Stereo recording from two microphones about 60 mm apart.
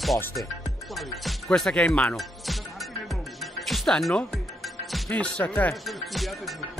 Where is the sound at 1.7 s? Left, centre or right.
Centre.